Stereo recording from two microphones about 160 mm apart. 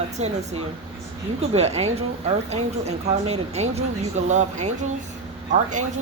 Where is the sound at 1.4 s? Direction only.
40° right (ahead or behind).